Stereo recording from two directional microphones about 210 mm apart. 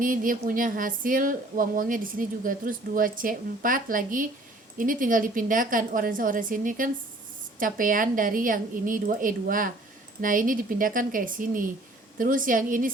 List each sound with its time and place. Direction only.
0.0 s speech: 40° right (ahead or behind)